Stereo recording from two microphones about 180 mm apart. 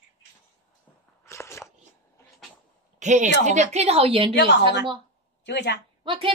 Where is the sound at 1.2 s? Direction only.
15° left (ahead or behind).